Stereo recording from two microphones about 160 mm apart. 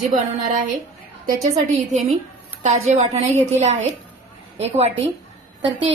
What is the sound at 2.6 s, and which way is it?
A woman's voice, 45° right (ahead or behind).